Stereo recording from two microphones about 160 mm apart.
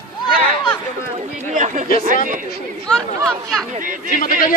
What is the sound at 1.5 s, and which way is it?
Speech, 50° right (ahead or behind).